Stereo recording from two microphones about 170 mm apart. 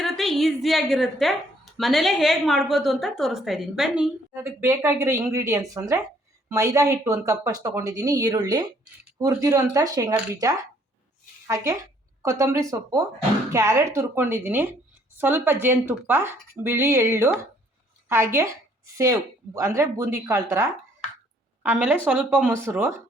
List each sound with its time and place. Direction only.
0.0 s a woman's voice: centre (ahead or behind)
4.3 s speech: 15° right (ahead or behind)
19.5 s speech: 20° right (ahead or behind)